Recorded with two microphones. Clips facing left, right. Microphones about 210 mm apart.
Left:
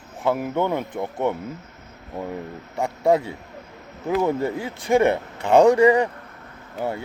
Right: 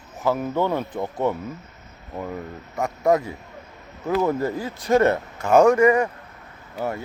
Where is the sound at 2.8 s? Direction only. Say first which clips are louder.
Left 1 dB; 30° left (ahead or behind).